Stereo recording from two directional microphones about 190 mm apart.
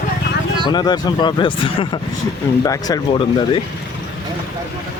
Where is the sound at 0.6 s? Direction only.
25° left (ahead or behind).